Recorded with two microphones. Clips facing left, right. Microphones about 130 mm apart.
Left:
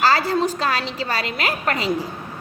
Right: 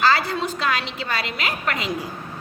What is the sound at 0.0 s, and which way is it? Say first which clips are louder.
A woman's voice: left 2 dB; 40° left (ahead or behind).